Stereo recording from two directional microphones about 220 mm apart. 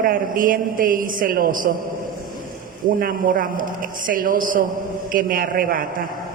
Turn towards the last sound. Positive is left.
turn(degrees=-40)  # may be behind; listen again after turning